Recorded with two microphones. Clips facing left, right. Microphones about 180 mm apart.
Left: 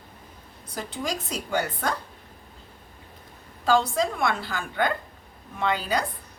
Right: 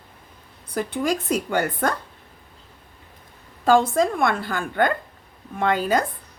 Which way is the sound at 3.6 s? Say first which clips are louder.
Right 5 dB; 50° right (ahead or behind).